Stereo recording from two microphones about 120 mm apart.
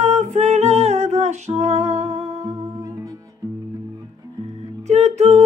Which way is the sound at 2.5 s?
25° right (ahead or behind).